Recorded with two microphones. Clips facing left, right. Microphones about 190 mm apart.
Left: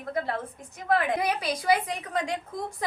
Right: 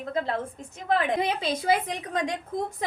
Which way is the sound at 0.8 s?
25° right (ahead or behind).